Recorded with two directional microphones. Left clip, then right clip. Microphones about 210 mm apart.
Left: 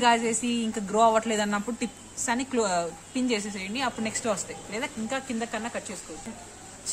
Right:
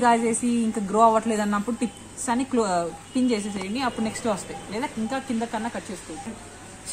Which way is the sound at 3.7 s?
30° left (ahead or behind).